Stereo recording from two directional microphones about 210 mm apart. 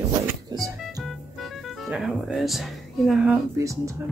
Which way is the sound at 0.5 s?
20° right (ahead or behind).